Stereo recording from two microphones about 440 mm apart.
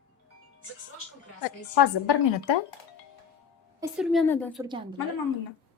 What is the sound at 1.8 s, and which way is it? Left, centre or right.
Speech, left.